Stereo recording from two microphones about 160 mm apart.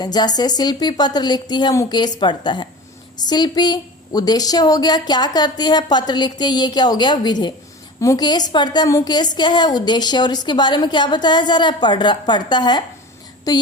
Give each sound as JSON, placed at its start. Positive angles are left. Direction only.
{"t": 0.0, "sound": "a woman's voice", "side_deg": 25}